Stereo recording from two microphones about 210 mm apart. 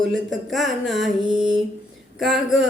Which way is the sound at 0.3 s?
Centre (ahead or behind).